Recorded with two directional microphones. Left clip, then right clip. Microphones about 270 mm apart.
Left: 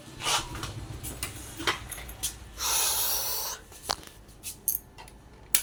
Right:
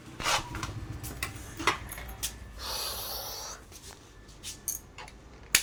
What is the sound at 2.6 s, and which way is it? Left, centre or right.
Snort, centre.